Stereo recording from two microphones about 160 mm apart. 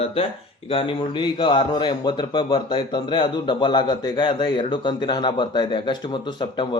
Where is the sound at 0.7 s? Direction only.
35° left (ahead or behind).